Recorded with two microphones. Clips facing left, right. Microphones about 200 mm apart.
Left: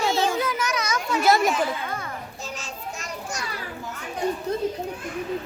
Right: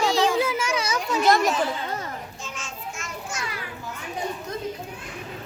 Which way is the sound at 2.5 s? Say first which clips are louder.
Left 4 dB; 35° left (ahead or behind).